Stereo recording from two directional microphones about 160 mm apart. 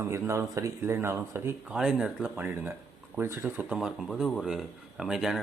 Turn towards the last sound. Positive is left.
turn(degrees=0)  # may be behind; listen again after turning